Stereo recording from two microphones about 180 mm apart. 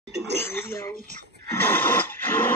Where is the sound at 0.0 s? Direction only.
70° right (ahead or behind).